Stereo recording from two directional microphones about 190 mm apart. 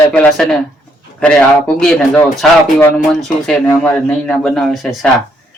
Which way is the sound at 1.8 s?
5° left (ahead or behind).